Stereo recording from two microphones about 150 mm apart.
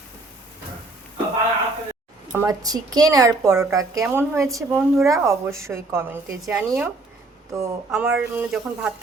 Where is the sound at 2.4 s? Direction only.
25° right (ahead or behind).